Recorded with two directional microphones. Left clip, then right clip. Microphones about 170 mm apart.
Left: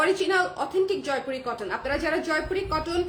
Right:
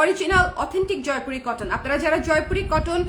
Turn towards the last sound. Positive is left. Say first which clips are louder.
# right 4 dB
turn(degrees=-25)  # may be behind; listen again after turning